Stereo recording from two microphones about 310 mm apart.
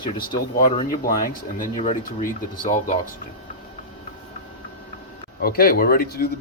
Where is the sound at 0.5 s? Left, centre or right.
Left.